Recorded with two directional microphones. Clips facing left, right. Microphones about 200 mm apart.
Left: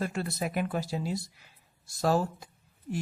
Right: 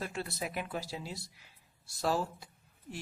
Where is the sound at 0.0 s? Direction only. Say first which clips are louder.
Left 6 dB; 50° left (ahead or behind).